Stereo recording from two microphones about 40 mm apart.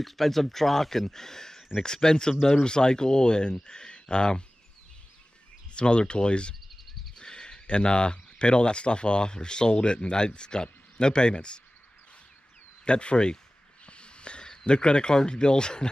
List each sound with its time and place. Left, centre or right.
0.0 s speech: centre; by 4.5 s left
5.8 s speech: left
12.8 s speech: left
13.8 s snort: left
14.7 s speech: left